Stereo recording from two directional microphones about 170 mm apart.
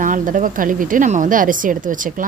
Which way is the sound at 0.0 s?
50° right (ahead or behind).